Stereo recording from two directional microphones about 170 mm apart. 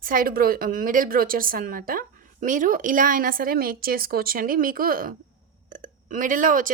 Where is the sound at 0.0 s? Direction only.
55° right (ahead or behind).